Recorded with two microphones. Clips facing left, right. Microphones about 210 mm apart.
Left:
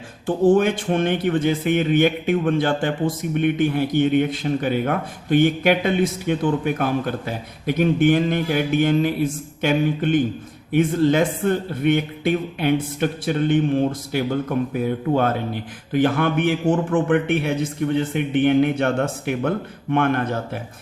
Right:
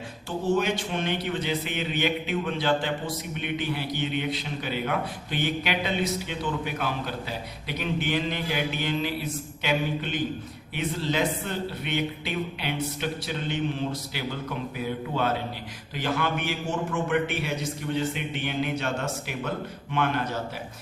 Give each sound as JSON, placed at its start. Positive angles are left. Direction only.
{"t": 0.3, "sound": "a man's voice", "side_deg": 50}